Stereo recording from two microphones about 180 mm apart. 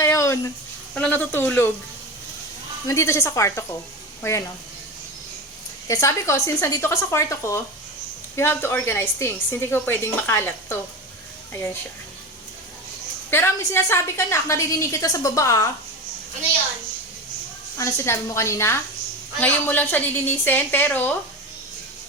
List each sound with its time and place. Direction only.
0.0 s a sound: 15° left (ahead or behind)
0.9 s a woman's voice: 10° left (ahead or behind)
2.8 s a woman's voice: 15° left (ahead or behind)
5.9 s a woman's voice: 15° left (ahead or behind)
13.3 s a woman's voice: 15° left (ahead or behind)
17.7 s a woman's voice: 15° left (ahead or behind)